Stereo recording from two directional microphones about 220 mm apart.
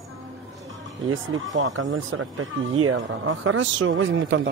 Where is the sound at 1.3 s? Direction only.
65° right (ahead or behind).